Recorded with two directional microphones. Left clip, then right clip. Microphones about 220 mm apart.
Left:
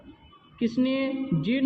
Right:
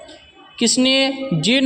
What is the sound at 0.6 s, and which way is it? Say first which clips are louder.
A man's voice: right 11 dB; 50° right (ahead or behind).